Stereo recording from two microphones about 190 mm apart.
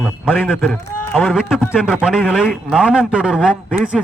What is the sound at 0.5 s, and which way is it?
Speech, 10° left (ahead or behind).